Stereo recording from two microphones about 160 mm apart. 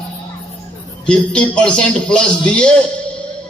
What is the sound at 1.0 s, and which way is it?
A man's voice, 5° left (ahead or behind).